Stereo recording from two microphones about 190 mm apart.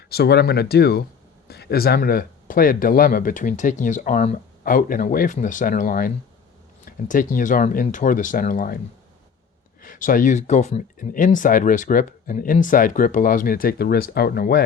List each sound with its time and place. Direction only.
0.1 s speech: 60° left (ahead or behind)
9.8 s speech: 45° left (ahead or behind)